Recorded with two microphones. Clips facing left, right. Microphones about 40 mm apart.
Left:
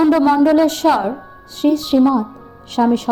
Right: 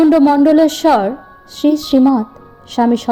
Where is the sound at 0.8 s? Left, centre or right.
Right.